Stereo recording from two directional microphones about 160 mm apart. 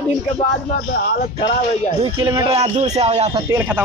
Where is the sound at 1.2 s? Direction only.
40° left (ahead or behind).